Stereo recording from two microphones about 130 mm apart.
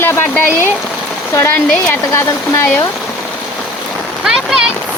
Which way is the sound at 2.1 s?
20° left (ahead or behind).